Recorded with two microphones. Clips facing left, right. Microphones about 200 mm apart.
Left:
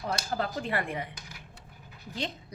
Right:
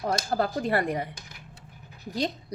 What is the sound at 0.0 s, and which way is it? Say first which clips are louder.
Speech: right 5 dB; 40° right (ahead or behind).